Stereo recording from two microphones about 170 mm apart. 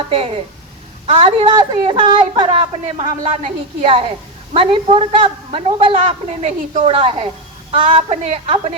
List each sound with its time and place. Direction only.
1.0 s a woman's voice: 35° right (ahead or behind)
2.8 s a woman's voice: 40° right (ahead or behind)